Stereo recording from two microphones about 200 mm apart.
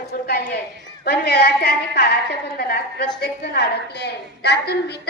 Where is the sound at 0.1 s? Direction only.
55° left (ahead or behind).